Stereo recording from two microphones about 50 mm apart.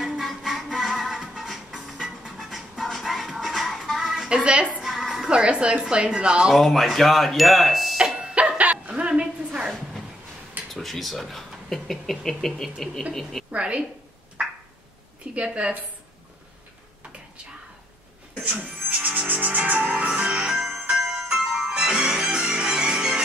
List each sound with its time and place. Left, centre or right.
0.0 s music: centre
4.3 s a woman's voice: right
4.8 s music: centre
5.3 s a woman's voice: right
6.5 s speech: centre
8.0 s dog: centre
8.4 s dog: right
10.7 s speech: centre
13.5 s a woman's voice: right
15.3 s a woman's voice: right
18.4 s a sound: right
18.9 s music: right; by 23.2 s centre